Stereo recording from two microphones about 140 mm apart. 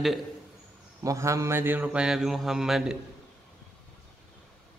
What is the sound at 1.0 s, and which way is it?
Mantra, 20° right (ahead or behind).